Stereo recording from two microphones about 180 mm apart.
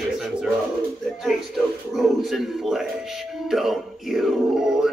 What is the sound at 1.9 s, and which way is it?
A man's voice, centre (ahead or behind).